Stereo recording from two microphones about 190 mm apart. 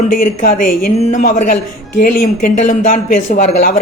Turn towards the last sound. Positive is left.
turn(degrees=35)  # may be behind; listen again after turning